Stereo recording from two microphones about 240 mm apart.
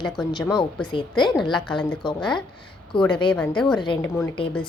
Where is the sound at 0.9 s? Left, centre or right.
Centre.